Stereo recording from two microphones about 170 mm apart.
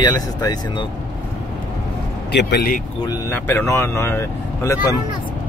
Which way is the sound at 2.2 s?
75° left (ahead or behind).